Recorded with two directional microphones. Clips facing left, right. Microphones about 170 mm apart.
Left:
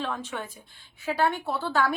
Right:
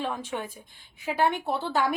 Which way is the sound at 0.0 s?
10° right (ahead or behind).